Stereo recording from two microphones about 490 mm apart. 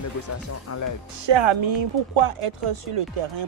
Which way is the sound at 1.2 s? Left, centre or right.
Right.